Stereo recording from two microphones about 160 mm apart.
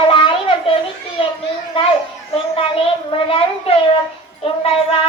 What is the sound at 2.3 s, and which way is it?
A child's voice, 35° left (ahead or behind).